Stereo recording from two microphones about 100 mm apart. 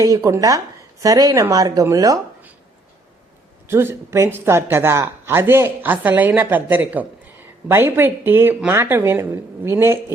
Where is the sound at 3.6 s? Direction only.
25° right (ahead or behind).